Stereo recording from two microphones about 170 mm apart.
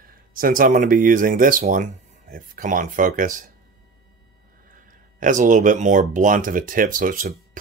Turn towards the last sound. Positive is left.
turn(degrees=-55)  # may be behind; listen again after turning